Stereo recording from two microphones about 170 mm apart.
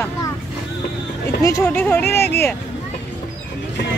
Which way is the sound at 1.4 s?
15° left (ahead or behind).